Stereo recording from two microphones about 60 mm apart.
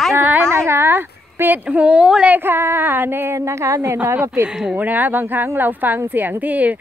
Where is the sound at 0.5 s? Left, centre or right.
Right.